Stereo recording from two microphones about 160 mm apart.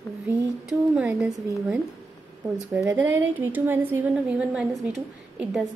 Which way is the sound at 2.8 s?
15° right (ahead or behind).